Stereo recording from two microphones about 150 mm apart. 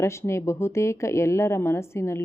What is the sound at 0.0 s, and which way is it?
Speech, 20° left (ahead or behind).